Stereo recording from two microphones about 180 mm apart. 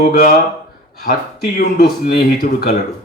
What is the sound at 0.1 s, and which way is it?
Speech, 55° left (ahead or behind).